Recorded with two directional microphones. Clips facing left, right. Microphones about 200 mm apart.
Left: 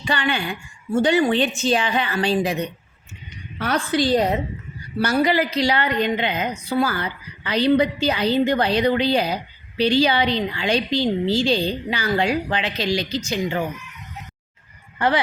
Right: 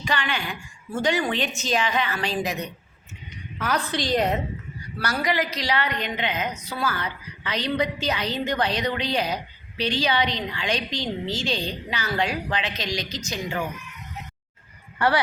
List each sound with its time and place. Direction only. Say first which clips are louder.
0.0 s a woman's voice: left 4 dB; 30° left (ahead or behind)
4.9 s a woman's voice: left 7 dB; 25° left (ahead or behind)
14.9 s speech: left 2 dB; 20° left (ahead or behind)